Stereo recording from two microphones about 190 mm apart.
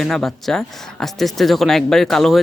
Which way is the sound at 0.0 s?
Centre (ahead or behind).